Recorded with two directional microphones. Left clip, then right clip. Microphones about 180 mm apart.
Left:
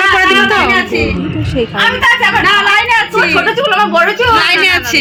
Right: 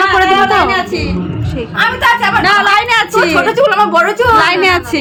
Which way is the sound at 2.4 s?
55° right (ahead or behind).